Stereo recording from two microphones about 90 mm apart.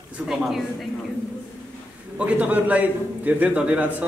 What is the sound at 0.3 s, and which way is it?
Speech, 5° right (ahead or behind).